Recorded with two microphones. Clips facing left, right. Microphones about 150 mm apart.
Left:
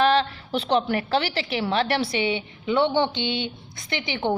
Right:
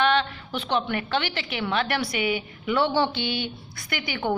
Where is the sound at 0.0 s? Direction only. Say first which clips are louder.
Left 3 dB; 35° left (ahead or behind).